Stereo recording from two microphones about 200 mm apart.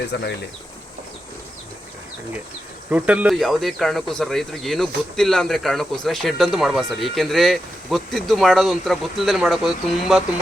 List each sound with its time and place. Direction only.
0.1 s speech: 55° left (ahead or behind)
2.9 s speech: 5° right (ahead or behind)